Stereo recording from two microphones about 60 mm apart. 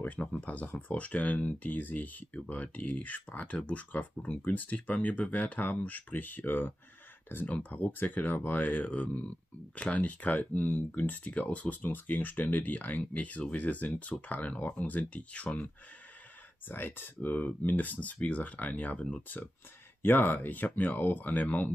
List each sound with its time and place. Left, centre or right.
0.0 s speech: left
16.6 s speech: left